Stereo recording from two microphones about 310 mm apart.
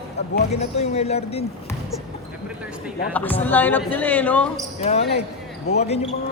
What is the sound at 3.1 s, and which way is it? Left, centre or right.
Speech, centre.